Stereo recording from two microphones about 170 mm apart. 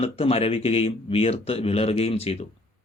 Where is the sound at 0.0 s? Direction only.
35° left (ahead or behind).